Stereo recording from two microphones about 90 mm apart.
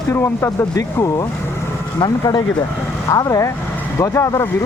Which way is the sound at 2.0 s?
55° left (ahead or behind).